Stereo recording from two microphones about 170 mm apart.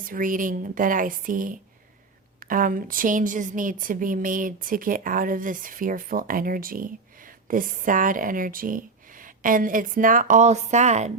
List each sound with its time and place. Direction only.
0.0 s a woman's voice: 55° right (ahead or behind)